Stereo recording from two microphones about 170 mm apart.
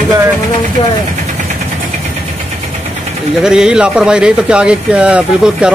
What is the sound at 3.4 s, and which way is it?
Speech, 5° right (ahead or behind).